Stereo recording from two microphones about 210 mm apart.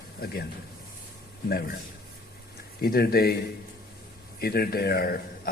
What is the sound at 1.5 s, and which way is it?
Speech, 45° left (ahead or behind).